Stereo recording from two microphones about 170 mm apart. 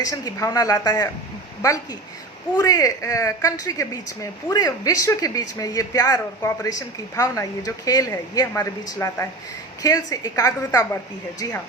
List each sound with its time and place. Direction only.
0.0 s speech: 20° left (ahead or behind)